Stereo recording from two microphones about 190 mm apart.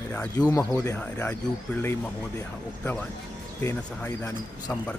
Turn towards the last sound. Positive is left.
turn(degrees=10)  # may be behind; listen again after turning